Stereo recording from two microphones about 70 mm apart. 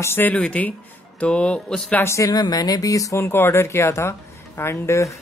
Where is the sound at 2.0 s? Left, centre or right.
Left.